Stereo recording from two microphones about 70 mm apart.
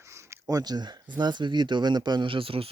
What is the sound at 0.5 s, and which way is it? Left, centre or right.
Speech, right.